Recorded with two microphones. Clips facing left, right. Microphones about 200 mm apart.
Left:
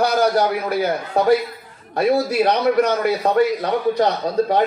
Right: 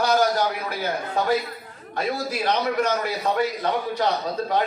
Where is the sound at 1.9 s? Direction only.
55° left (ahead or behind).